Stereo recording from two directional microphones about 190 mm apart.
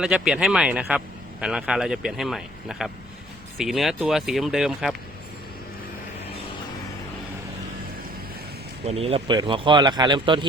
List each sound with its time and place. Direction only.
0.0 s speech: 5° right (ahead or behind)
8.9 s speech: 30° right (ahead or behind)